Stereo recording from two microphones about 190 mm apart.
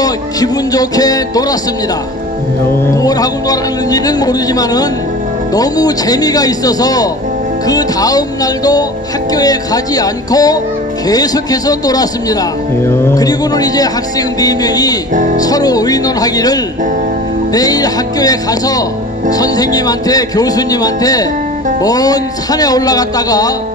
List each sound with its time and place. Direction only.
0.0 s a man's voice: 20° left (ahead or behind)
2.9 s a man's voice: 20° left (ahead or behind)
9.3 s a man's voice: 20° left (ahead or behind)